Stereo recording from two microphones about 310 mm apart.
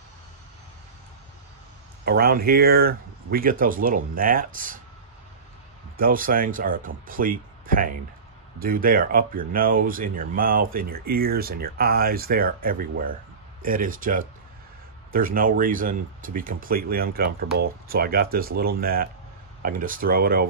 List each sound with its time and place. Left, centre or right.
2.0 s speech: right
5.9 s speech: right